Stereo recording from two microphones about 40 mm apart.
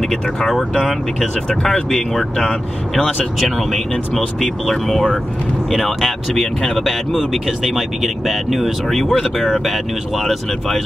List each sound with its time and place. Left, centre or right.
0.1 s speech: centre
3.3 s speech: centre
6.8 s speech: centre
9.7 s speech: centre